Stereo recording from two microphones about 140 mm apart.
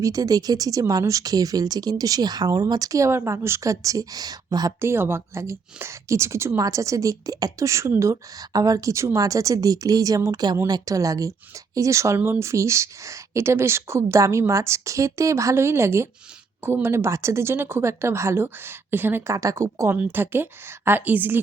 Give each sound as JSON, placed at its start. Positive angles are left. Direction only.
{"t": 0.0, "sound": "speech", "side_deg": -25}
{"t": 4.8, "sound": "speech", "side_deg": -15}